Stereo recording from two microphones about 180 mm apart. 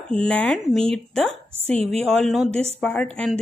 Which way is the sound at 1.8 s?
35° right (ahead or behind).